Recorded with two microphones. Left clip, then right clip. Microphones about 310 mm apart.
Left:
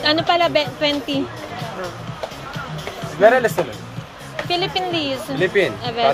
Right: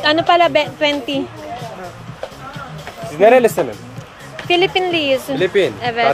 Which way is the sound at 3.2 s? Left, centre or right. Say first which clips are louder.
Right 4 dB; right.